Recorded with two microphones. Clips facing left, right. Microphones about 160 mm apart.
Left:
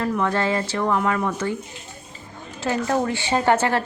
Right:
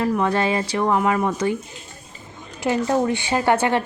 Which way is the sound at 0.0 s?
15° right (ahead or behind).